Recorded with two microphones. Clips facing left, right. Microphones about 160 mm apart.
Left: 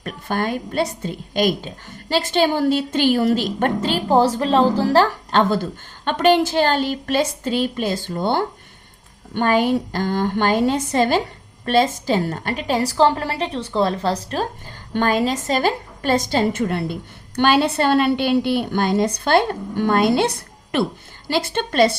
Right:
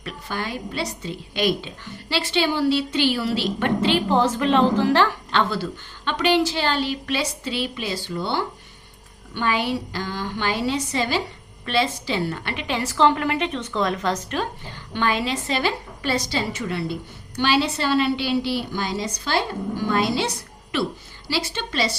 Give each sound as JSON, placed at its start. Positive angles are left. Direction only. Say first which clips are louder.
{"t": 0.0, "sound": "a woman's voice", "louder": "left 6 dB", "side_deg": 50}